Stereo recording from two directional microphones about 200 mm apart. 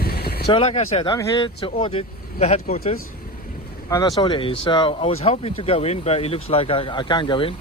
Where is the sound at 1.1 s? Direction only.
20° left (ahead or behind).